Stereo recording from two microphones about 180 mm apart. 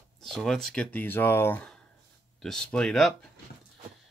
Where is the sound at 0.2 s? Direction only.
Centre (ahead or behind).